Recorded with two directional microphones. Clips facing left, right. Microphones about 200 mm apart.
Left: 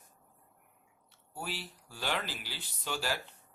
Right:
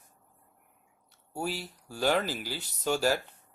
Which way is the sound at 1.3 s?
45° right (ahead or behind).